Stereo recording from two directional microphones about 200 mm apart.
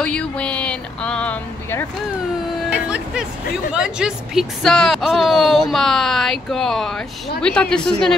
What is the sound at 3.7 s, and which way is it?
Speech, 5° right (ahead or behind).